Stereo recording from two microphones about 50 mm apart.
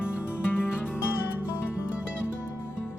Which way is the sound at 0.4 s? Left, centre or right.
Left.